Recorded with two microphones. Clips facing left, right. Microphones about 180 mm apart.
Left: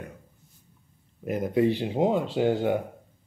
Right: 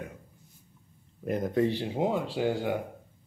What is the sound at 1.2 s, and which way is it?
Speech, 5° left (ahead or behind).